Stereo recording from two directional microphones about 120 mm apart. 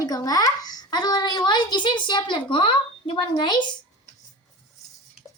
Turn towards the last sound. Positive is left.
turn(degrees=40)  # may be behind; listen again after turning